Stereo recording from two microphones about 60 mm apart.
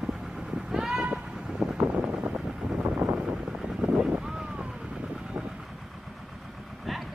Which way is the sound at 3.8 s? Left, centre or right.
Centre.